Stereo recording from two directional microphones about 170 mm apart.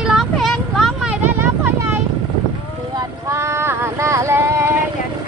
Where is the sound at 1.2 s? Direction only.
10° right (ahead or behind).